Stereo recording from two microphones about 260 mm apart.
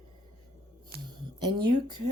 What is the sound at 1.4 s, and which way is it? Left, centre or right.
Speech, centre.